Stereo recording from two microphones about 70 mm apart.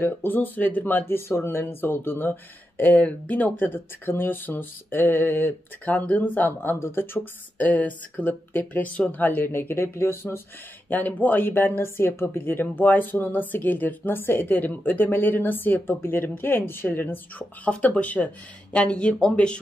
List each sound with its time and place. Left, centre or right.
0.0 s speech: left
10.9 s speech: left
17.6 s speech: centre